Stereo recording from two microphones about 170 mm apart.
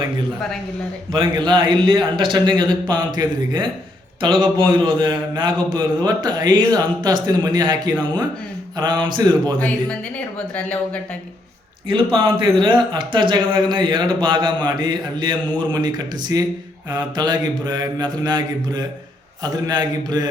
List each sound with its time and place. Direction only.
1.1 s speech: 30° right (ahead or behind)
9.6 s speech: 5° left (ahead or behind)
11.9 s speech: 30° right (ahead or behind)